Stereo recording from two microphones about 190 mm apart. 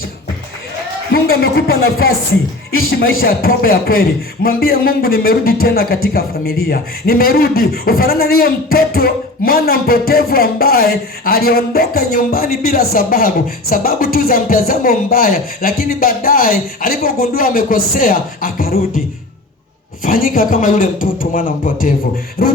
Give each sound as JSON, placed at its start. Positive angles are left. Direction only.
{"t": 1.1, "sound": "a man's voice", "side_deg": 55}